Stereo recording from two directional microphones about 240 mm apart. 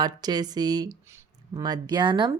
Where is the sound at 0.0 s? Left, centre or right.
Centre.